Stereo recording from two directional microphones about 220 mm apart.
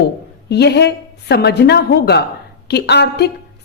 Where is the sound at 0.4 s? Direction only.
50° left (ahead or behind).